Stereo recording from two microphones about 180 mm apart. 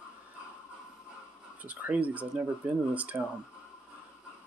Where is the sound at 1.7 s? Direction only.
10° right (ahead or behind).